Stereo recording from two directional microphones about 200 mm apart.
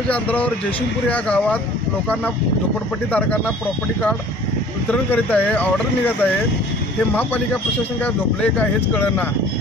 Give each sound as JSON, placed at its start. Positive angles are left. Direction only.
{"t": 0.1, "sound": "speech", "side_deg": 10}
{"t": 3.1, "sound": "speech", "side_deg": 5}
{"t": 5.1, "sound": "speech", "side_deg": 10}
{"t": 8.0, "sound": "speech", "side_deg": 10}